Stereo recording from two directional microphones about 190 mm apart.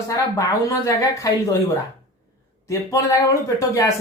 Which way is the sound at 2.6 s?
15° left (ahead or behind).